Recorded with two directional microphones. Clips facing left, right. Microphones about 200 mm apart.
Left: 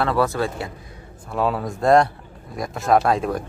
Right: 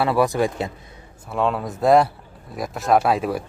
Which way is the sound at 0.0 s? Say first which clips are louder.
Right 2 dB; 15° right (ahead or behind).